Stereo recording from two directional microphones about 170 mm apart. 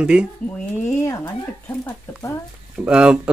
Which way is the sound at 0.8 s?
15° left (ahead or behind).